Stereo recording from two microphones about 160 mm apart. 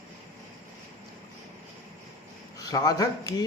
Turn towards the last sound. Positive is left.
turn(degrees=25)  # may be behind; listen again after turning